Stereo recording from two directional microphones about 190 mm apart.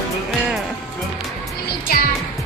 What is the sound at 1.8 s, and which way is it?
Music, 50° left (ahead or behind).